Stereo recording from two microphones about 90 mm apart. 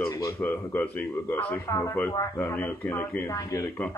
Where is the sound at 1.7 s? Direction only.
35° left (ahead or behind).